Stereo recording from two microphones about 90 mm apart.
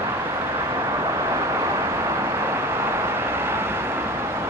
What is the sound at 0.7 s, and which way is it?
Vehicle, 35° right (ahead or behind).